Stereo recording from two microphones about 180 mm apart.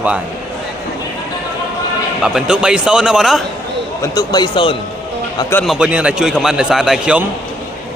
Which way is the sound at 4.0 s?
20° left (ahead or behind).